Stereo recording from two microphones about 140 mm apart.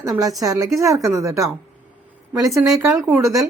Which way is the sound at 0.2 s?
25° right (ahead or behind).